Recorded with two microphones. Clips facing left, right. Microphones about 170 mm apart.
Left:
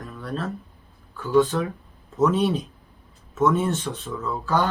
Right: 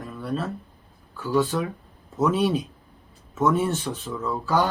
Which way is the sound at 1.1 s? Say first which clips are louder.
Left 3 dB; 5° right (ahead or behind).